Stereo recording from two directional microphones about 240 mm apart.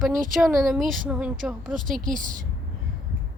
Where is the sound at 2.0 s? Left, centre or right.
Right.